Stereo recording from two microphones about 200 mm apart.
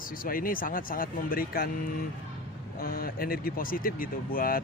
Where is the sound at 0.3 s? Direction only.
45° left (ahead or behind).